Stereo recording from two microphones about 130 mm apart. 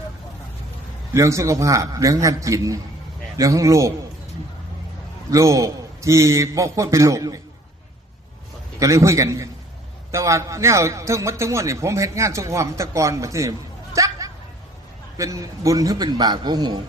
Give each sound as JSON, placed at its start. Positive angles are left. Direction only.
{"t": 1.1, "sound": "a man's voice", "side_deg": -25}
{"t": 5.3, "sound": "a man's voice", "side_deg": -25}
{"t": 8.8, "sound": "a man's voice", "side_deg": -25}
{"t": 13.9, "sound": "a sound", "side_deg": -25}
{"t": 15.2, "sound": "a man's voice", "side_deg": -25}